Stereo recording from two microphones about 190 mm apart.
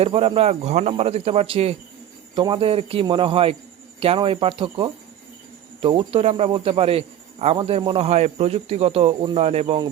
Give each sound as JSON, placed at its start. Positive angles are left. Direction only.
{"t": 0.0, "sound": "a man's voice", "side_deg": -30}